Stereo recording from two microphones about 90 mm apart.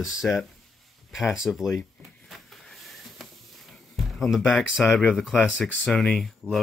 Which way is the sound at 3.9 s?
Centre (ahead or behind).